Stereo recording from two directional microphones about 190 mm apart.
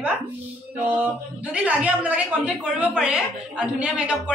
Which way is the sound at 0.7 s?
10° right (ahead or behind).